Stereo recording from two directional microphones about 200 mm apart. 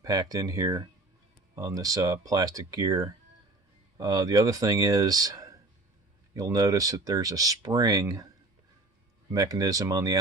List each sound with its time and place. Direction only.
0.0 s speech: 20° right (ahead or behind)
9.3 s speech: 20° right (ahead or behind)